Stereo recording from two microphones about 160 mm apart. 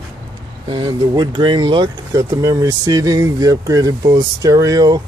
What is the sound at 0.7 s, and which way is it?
Speech, 30° right (ahead or behind).